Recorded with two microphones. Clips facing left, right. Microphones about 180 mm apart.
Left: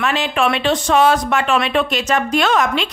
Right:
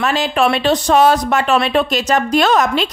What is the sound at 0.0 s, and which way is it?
Speech, 40° right (ahead or behind).